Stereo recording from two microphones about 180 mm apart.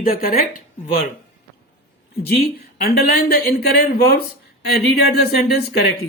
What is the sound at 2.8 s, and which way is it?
Speech, 55° left (ahead or behind).